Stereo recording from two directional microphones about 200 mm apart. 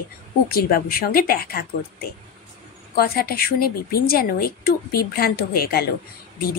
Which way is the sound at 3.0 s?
45° left (ahead or behind).